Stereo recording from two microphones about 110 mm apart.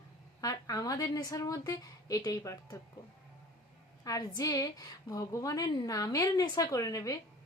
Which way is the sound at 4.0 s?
35° left (ahead or behind).